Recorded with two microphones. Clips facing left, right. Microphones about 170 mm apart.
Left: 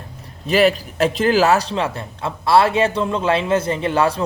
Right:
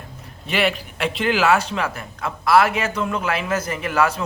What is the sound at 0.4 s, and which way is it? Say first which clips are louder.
Speech: left 6 dB; 40° left (ahead or behind).